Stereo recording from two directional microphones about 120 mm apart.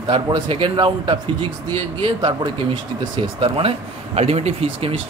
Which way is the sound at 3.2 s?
50° right (ahead or behind).